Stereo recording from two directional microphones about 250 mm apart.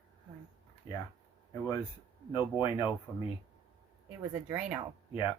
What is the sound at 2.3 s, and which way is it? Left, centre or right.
Speech, centre.